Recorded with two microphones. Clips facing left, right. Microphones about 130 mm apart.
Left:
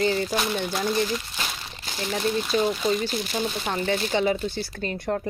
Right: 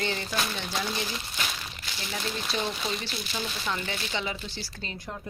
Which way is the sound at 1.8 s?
45° left (ahead or behind).